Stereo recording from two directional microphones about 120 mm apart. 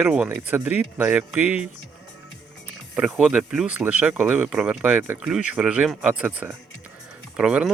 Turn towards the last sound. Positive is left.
turn(degrees=-10)  # may be behind; listen again after turning